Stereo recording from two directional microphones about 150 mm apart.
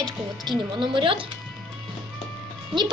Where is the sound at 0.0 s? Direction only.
30° right (ahead or behind).